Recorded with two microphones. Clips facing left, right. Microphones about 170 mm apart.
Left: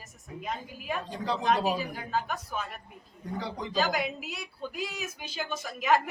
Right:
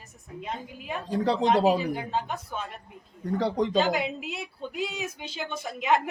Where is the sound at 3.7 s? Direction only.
25° right (ahead or behind).